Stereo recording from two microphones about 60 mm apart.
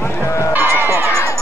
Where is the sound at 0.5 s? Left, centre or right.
Right.